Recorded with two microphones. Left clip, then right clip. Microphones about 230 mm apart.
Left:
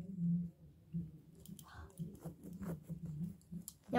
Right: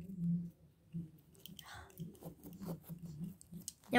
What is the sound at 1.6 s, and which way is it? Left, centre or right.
Whispering, right.